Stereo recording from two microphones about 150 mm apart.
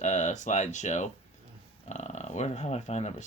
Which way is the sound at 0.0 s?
50° left (ahead or behind).